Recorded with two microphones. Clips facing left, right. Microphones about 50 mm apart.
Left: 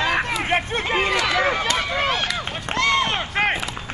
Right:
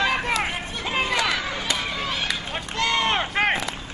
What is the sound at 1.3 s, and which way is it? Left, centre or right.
Run, left.